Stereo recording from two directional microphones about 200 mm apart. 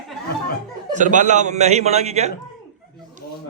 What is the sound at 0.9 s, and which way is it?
A man's voice, 40° right (ahead or behind).